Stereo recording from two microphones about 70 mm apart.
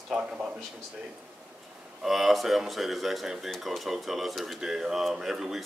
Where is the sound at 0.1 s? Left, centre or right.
Centre.